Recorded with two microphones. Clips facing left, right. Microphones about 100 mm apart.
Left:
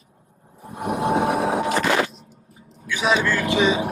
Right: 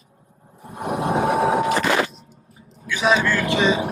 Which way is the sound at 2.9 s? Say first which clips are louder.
Right 2 dB; 15° left (ahead or behind).